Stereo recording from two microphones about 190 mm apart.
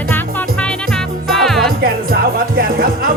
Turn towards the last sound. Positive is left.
turn(degrees=-50)  # may be behind; listen again after turning